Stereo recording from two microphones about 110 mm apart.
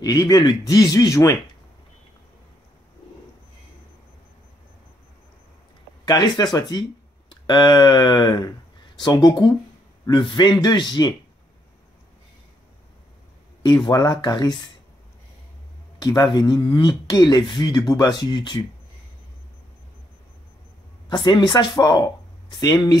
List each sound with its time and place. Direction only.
0.0 s a man's voice: 35° left (ahead or behind)
6.0 s a man's voice: 40° left (ahead or behind)
13.8 s a man's voice: 40° left (ahead or behind)
16.0 s a man's voice: 35° left (ahead or behind)
21.1 s a man's voice: 45° left (ahead or behind)